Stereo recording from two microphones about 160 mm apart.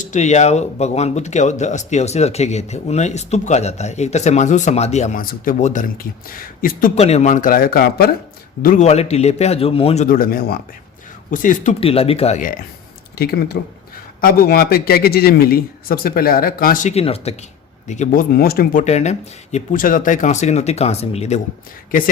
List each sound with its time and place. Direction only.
0.0 s speech: 45° left (ahead or behind)
5.2 s a man's voice: 65° left (ahead or behind)
5.5 s speech: 45° left (ahead or behind)
6.0 s a man's voice: 65° left (ahead or behind)
6.9 s a man's voice: 40° left (ahead or behind); by 8.1 s 70° left (ahead or behind)
8.6 s a man's voice: 50° left (ahead or behind)
10.1 s a man's voice: 65° left (ahead or behind); by 12.4 s 40° left (ahead or behind)
13.1 s speech: 80° left
14.2 s a man's voice: 70° left (ahead or behind)
16.9 s a man's voice: 40° left (ahead or behind)